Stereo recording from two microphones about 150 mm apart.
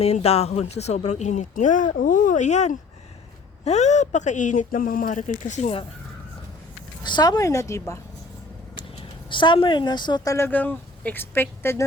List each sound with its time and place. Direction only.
0.0 s speech: 45° left (ahead or behind)
7.0 s speech: 30° left (ahead or behind)
9.3 s speech: 35° left (ahead or behind); by 11.9 s 15° left (ahead or behind)